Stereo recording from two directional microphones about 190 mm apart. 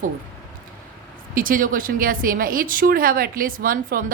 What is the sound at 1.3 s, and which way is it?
Speech, 45° right (ahead or behind).